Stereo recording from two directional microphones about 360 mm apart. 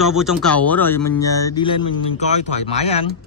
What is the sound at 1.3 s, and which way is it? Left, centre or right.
Speech, centre.